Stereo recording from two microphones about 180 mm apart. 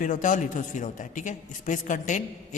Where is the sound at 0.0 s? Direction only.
45° left (ahead or behind).